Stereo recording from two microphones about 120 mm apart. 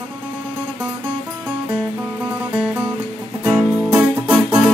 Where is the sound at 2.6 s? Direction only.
10° right (ahead or behind).